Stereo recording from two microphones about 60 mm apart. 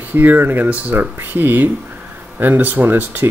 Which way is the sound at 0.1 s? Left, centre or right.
Right.